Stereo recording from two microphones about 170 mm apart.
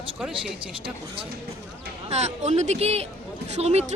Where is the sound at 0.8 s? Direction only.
30° right (ahead or behind).